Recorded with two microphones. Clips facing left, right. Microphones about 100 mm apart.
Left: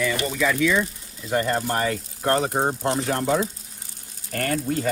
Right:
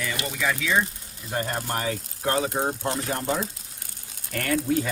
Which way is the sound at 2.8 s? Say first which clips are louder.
Left 4 dB; 90° left.